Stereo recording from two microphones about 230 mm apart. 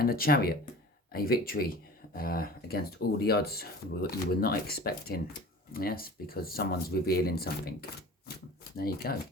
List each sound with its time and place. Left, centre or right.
0.0 s speech: left